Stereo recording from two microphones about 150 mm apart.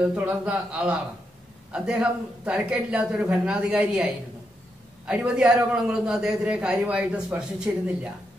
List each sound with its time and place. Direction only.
0.0 s a man's voice: 10° right (ahead or behind)